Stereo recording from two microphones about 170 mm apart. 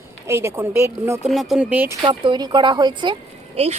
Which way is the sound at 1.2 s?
Centre (ahead or behind).